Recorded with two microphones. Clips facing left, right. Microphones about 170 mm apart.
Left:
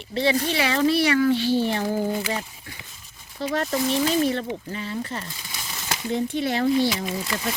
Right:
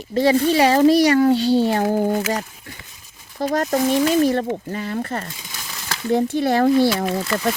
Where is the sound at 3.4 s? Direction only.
45° right (ahead or behind).